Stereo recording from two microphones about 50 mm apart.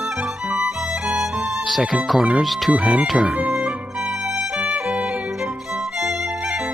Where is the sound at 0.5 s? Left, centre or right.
Centre.